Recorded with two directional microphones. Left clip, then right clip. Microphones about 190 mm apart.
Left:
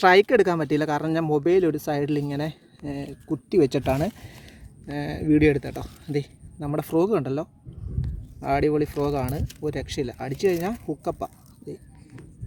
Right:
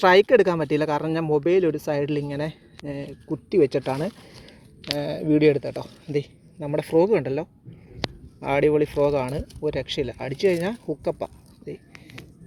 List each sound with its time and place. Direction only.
0.0 s speech: 15° left (ahead or behind); by 4.1 s 35° left (ahead or behind)
4.9 s speech: 15° left (ahead or behind)